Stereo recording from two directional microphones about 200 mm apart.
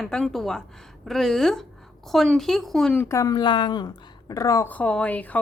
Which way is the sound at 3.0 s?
15° left (ahead or behind).